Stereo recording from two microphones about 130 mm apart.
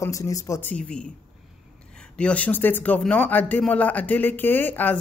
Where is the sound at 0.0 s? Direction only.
25° left (ahead or behind); by 1.0 s 10° left (ahead or behind).